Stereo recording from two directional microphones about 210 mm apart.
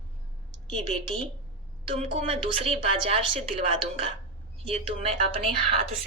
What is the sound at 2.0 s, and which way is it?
A woman's voice, 30° right (ahead or behind).